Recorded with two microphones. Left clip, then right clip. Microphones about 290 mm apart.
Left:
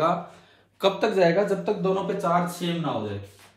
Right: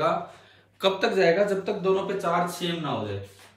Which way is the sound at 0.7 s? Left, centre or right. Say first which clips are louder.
Left 1 dB; centre.